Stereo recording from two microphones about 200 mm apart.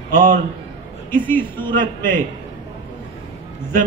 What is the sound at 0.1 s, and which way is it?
Speech, 40° right (ahead or behind).